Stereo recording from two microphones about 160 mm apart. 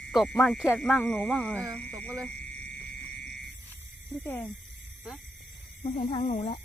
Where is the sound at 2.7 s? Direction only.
5° left (ahead or behind).